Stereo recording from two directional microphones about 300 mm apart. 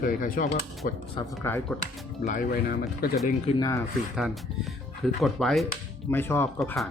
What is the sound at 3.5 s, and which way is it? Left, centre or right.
Speech, centre.